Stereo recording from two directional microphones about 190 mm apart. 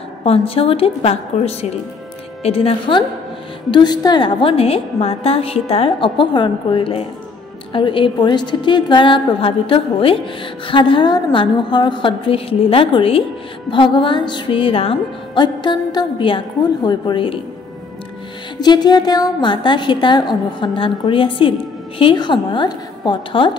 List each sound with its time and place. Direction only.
0.2 s a woman's voice: 30° left (ahead or behind)
18.6 s a woman's voice: 20° left (ahead or behind)